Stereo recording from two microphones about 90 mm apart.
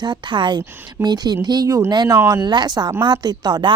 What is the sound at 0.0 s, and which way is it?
Speech, 60° right (ahead or behind).